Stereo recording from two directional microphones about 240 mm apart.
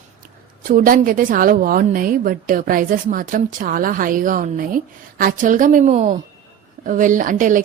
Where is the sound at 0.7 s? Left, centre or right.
Right.